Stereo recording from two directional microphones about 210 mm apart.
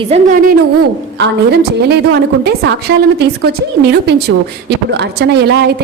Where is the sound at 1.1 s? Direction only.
55° right (ahead or behind).